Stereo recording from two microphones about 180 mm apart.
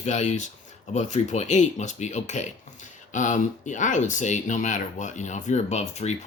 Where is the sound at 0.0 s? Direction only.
40° left (ahead or behind).